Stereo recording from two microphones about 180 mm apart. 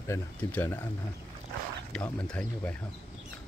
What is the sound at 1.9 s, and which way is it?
Speech, 5° left (ahead or behind).